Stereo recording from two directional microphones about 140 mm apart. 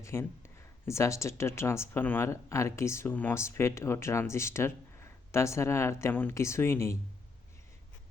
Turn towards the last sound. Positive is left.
turn(degrees=20)  # may be behind; listen again after turning